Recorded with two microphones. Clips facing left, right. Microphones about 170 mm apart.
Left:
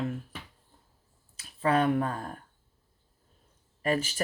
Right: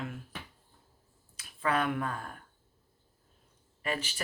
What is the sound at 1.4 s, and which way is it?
Speech, 35° left (ahead or behind).